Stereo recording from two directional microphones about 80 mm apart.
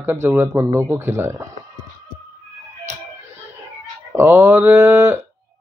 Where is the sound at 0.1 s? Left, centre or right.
Right.